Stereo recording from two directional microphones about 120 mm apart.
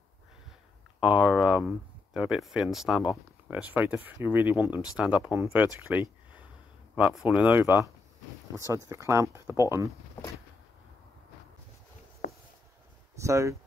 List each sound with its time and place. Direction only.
1.0 s speech: 5° right (ahead or behind)
7.2 s speech: 10° right (ahead or behind); by 9.9 s 25° right (ahead or behind)
13.2 s speech: 25° right (ahead or behind)